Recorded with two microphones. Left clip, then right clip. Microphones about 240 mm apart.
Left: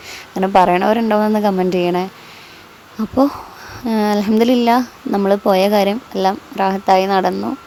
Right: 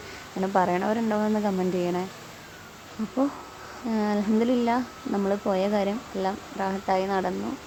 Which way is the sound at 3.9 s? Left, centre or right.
Left.